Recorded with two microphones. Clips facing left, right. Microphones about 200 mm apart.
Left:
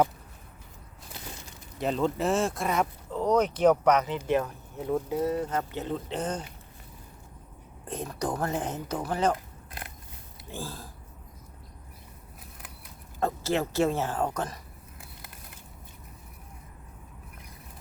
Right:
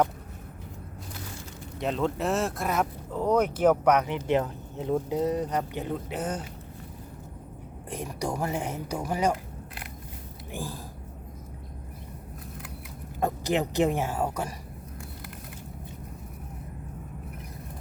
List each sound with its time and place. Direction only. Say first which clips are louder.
1.8 s speech: left 1 dB; centre (ahead or behind)
7.9 s speech: even; 10° right (ahead or behind)
10.5 s speech: right 2 dB; 15° right (ahead or behind)
13.1 s speech: right 1 dB; 15° right (ahead or behind)